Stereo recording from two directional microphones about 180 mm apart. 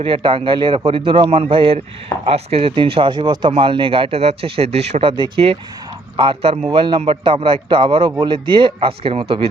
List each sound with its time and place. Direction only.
0.0 s speech: 30° right (ahead or behind)